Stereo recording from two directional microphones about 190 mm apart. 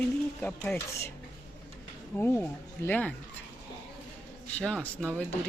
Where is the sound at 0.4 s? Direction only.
10° left (ahead or behind).